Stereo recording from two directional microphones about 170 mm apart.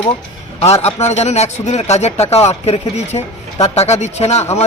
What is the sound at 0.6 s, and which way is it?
Speech, 40° left (ahead or behind).